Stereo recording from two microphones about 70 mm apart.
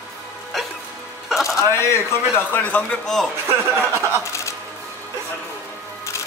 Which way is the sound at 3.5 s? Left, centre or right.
Right.